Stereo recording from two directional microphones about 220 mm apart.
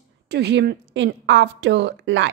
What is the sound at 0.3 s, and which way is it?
A woman's voice, 50° right (ahead or behind).